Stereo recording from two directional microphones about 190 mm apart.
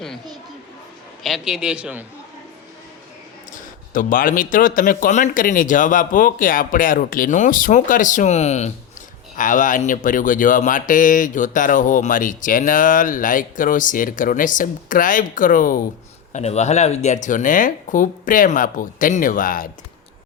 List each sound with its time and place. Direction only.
1.2 s a man's voice: centre (ahead or behind)
3.5 s speech: 45° left (ahead or behind)
16.3 s speech: 35° left (ahead or behind)